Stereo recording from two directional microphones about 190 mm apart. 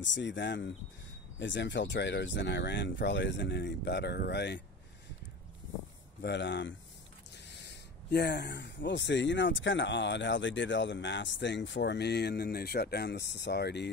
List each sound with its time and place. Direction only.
0.0 s speech: 70° left (ahead or behind)
6.2 s speech: 65° left (ahead or behind)